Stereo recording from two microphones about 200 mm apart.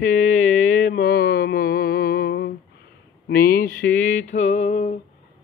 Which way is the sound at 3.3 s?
50° left (ahead or behind).